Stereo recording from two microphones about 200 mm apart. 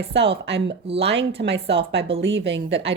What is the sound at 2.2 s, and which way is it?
Speech, 65° right (ahead or behind).